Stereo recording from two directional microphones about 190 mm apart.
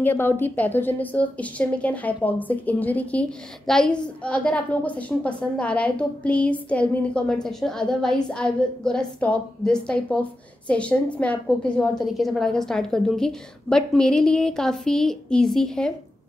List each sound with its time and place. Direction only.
0.0 s a woman's voice: 10° left (ahead or behind)